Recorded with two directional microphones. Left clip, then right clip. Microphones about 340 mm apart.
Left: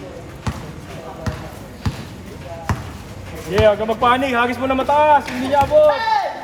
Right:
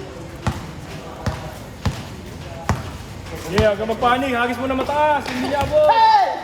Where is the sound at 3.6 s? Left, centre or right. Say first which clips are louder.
Left 3 dB; centre.